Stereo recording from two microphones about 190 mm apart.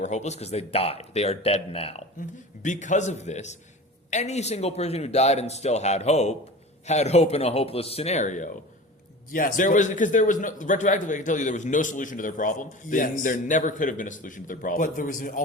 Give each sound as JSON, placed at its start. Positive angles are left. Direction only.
{"t": 0.0, "sound": "a man's voice", "side_deg": 35}